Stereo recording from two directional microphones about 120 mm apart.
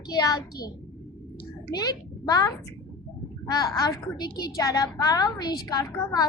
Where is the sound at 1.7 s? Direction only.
35° left (ahead or behind).